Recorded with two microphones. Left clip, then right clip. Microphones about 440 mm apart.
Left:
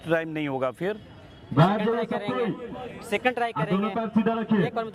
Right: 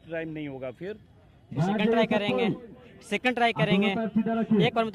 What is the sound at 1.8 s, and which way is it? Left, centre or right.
Speech, right.